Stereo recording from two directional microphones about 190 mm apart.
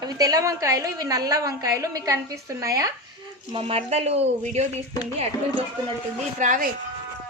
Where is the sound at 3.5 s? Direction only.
30° right (ahead or behind).